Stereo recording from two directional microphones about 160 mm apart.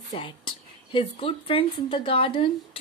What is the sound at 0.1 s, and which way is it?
A woman's voice, 30° left (ahead or behind).